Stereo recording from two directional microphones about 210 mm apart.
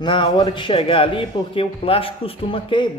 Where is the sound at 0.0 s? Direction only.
25° left (ahead or behind).